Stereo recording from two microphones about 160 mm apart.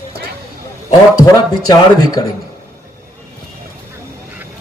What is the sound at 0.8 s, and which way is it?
A man's voice, 25° left (ahead or behind).